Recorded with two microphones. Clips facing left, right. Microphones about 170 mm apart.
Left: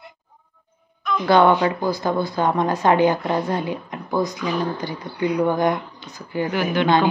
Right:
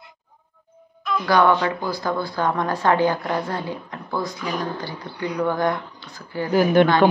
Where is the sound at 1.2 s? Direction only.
25° left (ahead or behind).